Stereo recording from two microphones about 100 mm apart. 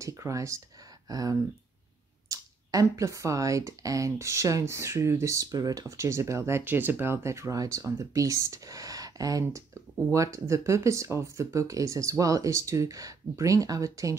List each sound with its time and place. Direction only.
0.0 s speech: 30° right (ahead or behind)